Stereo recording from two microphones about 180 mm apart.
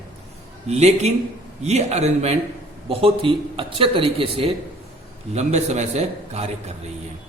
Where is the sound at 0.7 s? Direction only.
35° right (ahead or behind).